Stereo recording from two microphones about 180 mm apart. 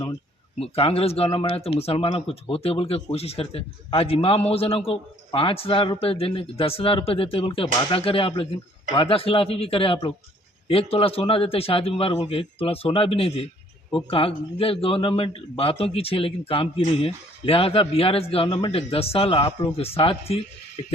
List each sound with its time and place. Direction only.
0.6 s a man's voice: 30° left (ahead or behind)